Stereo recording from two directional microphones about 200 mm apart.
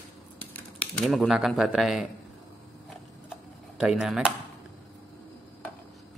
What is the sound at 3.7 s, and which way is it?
Speech, 5° right (ahead or behind).